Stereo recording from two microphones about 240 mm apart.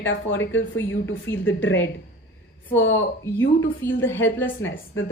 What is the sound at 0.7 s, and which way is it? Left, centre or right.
Speech, left.